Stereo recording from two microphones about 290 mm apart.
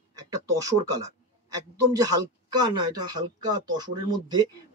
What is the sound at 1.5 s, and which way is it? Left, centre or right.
Speech, centre.